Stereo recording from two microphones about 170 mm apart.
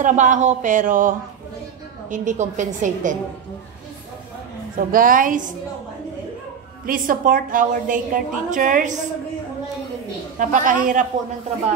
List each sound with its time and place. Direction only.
0.0 s a woman's voice: 45° right (ahead or behind)
4.7 s a woman's voice: 55° right (ahead or behind)
6.9 s a woman's voice: 55° right (ahead or behind)
10.4 s a woman's voice: 50° right (ahead or behind)